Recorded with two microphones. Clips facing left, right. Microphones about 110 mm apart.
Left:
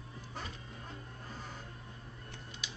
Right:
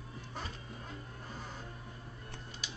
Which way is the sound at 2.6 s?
40° right (ahead or behind).